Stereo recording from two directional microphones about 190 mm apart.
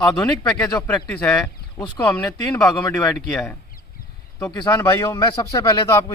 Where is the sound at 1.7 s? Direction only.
5° left (ahead or behind).